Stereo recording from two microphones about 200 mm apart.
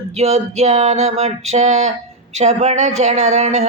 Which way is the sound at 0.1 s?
30° right (ahead or behind).